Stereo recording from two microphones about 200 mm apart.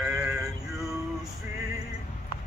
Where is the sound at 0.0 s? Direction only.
5° right (ahead or behind).